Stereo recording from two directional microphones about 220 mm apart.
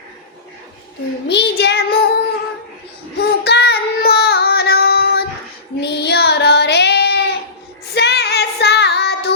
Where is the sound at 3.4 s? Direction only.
50° left (ahead or behind).